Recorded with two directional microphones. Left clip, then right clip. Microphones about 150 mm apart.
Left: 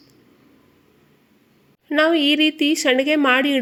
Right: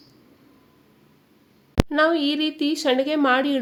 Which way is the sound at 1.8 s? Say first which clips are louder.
Left 3 dB; 15° left (ahead or behind).